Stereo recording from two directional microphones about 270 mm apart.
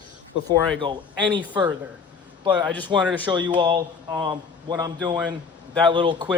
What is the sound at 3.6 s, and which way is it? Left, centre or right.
Speech, centre.